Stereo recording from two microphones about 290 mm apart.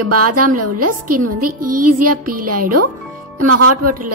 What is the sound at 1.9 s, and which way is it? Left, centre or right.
A woman's voice, right.